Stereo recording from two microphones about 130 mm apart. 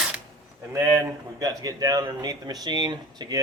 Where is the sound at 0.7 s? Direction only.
20° right (ahead or behind).